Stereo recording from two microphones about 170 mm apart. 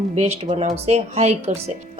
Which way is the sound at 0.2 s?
40° right (ahead or behind).